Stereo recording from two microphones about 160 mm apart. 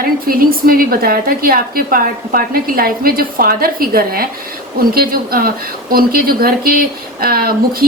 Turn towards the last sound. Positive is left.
turn(degrees=-65)  # may be behind; listen again after turning